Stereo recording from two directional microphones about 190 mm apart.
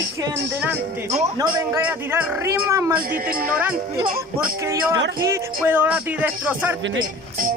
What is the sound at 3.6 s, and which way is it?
Speech, 10° right (ahead or behind).